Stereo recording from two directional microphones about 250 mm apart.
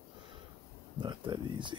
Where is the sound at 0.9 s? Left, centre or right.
Centre.